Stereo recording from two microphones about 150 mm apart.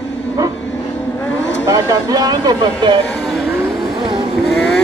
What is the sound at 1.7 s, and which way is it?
Speech, 20° right (ahead or behind).